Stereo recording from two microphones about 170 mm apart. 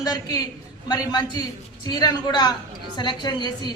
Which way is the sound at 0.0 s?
20° left (ahead or behind).